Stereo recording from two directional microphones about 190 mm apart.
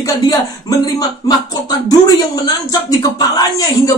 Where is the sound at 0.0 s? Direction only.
20° left (ahead or behind).